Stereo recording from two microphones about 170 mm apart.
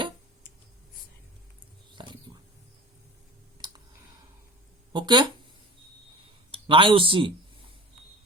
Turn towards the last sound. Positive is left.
turn(degrees=-30)  # may be behind; listen again after turning